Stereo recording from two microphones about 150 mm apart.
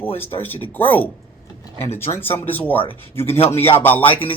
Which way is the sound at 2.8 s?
40° left (ahead or behind).